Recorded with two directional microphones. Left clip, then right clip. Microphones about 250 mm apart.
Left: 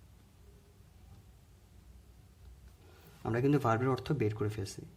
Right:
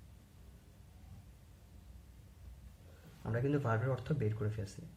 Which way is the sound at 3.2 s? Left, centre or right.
Left.